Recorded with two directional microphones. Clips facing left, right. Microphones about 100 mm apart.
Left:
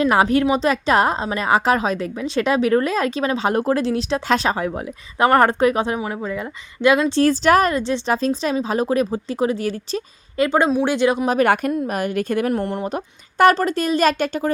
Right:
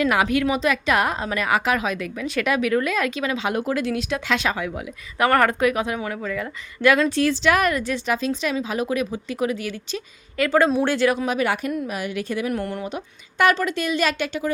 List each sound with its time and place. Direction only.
0.0 s a woman's voice: 35° left (ahead or behind)
7.2 s a woman's voice: 40° left (ahead or behind)
10.3 s speech: 25° left (ahead or behind)
11.3 s speech: 50° left (ahead or behind)
12.5 s speech: 25° left (ahead or behind)
13.4 s a woman's voice: 40° left (ahead or behind)